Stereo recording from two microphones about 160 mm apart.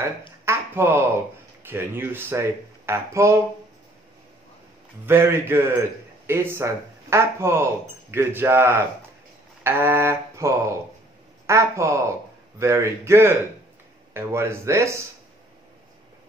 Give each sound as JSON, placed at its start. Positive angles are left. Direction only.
{"t": 0.5, "sound": "speech", "side_deg": -15}
{"t": 5.0, "sound": "speech", "side_deg": -15}